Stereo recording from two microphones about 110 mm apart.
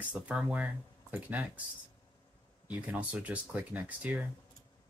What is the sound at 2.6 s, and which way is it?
Speech, 15° right (ahead or behind).